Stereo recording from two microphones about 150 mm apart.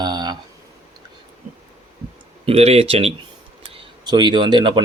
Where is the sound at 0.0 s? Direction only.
30° right (ahead or behind).